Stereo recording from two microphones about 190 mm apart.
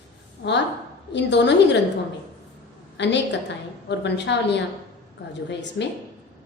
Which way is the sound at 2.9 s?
65° left (ahead or behind).